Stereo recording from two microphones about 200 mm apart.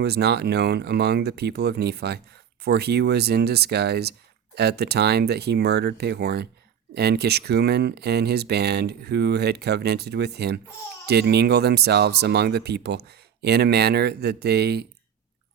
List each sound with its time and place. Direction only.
0.0 s speech: 55° right (ahead or behind)